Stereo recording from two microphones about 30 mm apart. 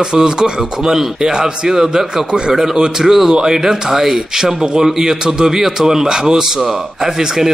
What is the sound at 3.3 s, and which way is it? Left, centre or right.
A man's voice, right.